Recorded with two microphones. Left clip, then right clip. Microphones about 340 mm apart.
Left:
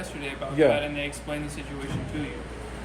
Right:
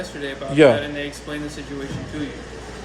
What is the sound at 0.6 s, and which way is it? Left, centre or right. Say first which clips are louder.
Speech: right 8 dB; right.